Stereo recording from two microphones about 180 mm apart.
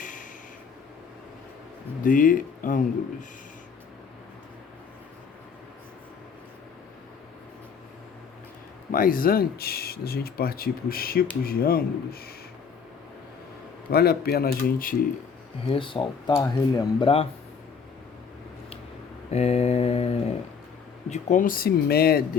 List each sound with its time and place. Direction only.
0.0 s a sound: 45° left (ahead or behind)
2.0 s speech: 50° left (ahead or behind)
8.9 s speech: 50° left (ahead or behind)
13.9 s speech: 60° left (ahead or behind)
15.6 s speech: 30° left (ahead or behind)
19.3 s mantra: 35° left (ahead or behind)
21.1 s speech: 45° left (ahead or behind)